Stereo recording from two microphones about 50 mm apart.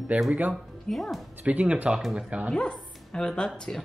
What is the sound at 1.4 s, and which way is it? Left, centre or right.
Speech, right.